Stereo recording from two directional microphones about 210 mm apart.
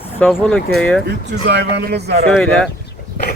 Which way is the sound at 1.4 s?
50° right (ahead or behind).